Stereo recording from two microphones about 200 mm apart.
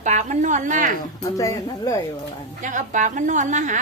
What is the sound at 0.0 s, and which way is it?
Speech, 35° right (ahead or behind).